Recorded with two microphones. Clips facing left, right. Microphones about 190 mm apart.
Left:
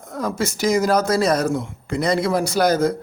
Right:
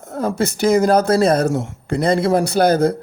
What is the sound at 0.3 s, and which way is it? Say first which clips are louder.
Speech: right 4 dB; 60° right (ahead or behind).